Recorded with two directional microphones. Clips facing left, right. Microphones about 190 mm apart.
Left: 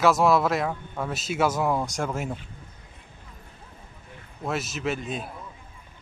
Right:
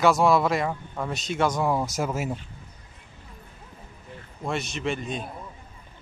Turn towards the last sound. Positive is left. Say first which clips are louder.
# even
turn(degrees=5)  # may be behind; listen again after turning